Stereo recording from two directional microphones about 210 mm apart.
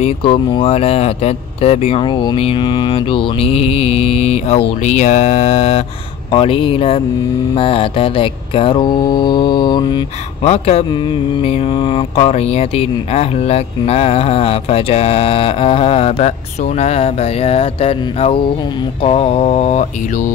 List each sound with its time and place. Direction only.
0.0 s mantra: 25° left (ahead or behind)